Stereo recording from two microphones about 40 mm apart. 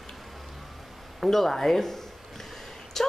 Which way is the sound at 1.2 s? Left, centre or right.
Centre.